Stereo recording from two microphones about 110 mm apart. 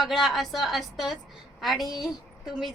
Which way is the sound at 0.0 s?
Centre (ahead or behind).